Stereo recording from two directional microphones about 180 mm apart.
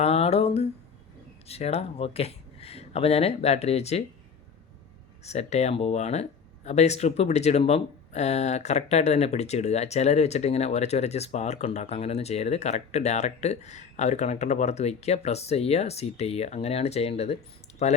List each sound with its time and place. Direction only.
0.0 s a sound: 35° left (ahead or behind)
1.5 s speech: 35° left (ahead or behind)
5.2 s speech: 35° left (ahead or behind)